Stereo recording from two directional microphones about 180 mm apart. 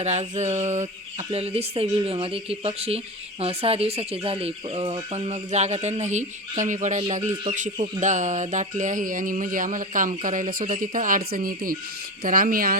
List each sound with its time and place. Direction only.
0.0 s speech: 40° right (ahead or behind)
7.5 s music: 45° right (ahead or behind)